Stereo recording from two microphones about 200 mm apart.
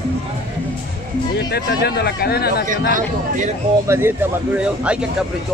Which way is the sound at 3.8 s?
10° right (ahead or behind).